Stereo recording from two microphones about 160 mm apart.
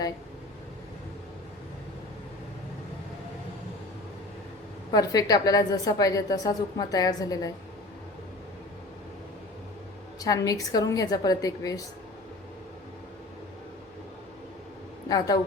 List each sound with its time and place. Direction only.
4.9 s a woman's voice: 25° left (ahead or behind)
10.2 s a woman's voice: 20° left (ahead or behind)